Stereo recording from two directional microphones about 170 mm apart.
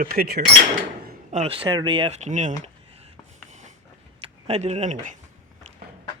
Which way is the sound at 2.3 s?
45° right (ahead or behind).